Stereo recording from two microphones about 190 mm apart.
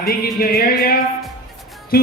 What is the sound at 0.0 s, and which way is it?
A man's voice, 50° left (ahead or behind).